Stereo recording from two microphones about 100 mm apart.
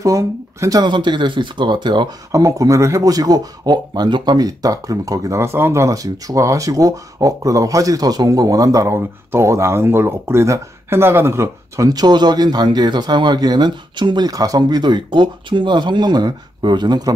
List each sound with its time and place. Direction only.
0.0 s speech: 35° right (ahead or behind)
0.8 s speech: 50° right (ahead or behind)
2.3 s speech: 35° right (ahead or behind)